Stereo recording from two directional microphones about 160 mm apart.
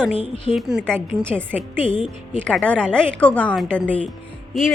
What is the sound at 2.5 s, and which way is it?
A woman's voice, 5° left (ahead or behind).